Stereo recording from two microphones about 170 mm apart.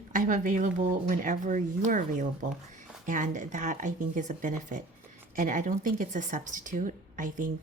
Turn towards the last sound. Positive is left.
turn(degrees=-50)  # may be behind; listen again after turning